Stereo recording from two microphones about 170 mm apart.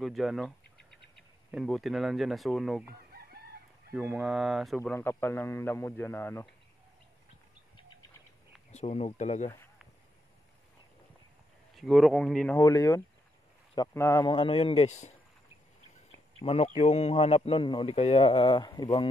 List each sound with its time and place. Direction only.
0.0 s speech: centre (ahead or behind)
3.9 s speech: 5° right (ahead or behind)
4.9 s a man's voice: 15° left (ahead or behind)
8.7 s speech: 40° left (ahead or behind)
11.7 s speech: centre (ahead or behind)
12.5 s a man's voice: 20° left (ahead or behind)
14.2 s speech: 30° left (ahead or behind)
16.3 s speech: 35° left (ahead or behind)